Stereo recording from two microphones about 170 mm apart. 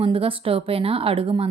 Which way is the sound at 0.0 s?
30° right (ahead or behind).